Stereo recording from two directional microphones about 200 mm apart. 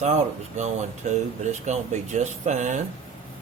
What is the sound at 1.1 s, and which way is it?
Speech, 35° right (ahead or behind).